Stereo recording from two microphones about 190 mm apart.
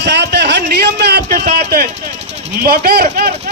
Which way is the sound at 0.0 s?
60° right (ahead or behind).